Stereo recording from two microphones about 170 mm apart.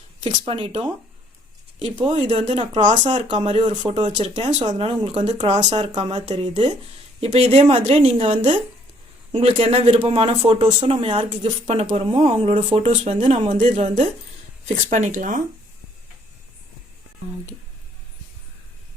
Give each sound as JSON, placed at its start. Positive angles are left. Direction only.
{"t": 0.3, "sound": "speech", "side_deg": -30}